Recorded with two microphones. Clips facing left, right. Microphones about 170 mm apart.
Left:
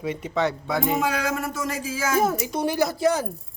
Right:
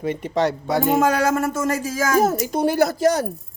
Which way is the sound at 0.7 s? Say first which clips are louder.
Right 5 dB; 75° right (ahead or behind).